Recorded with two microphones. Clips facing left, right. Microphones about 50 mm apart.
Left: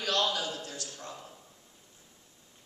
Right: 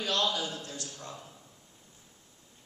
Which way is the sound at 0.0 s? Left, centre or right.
Left.